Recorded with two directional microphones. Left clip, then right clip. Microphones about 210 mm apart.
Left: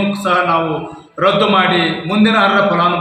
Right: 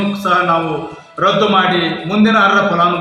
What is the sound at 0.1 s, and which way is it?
A man's voice, centre (ahead or behind).